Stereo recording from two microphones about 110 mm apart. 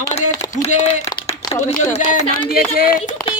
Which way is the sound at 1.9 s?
75° left (ahead or behind).